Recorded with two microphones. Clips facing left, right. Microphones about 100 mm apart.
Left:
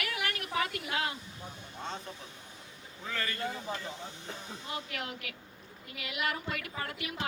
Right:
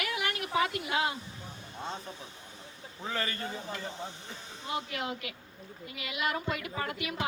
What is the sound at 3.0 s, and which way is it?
Speech, 25° right (ahead or behind).